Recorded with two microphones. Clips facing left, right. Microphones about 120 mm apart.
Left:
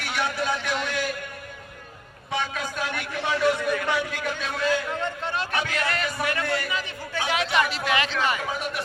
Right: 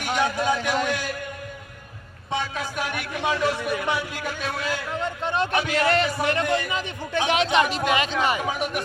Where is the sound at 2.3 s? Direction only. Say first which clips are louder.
Right 1 dB; 25° right (ahead or behind).